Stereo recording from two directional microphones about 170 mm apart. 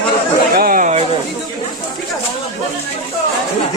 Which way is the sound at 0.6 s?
55° right (ahead or behind).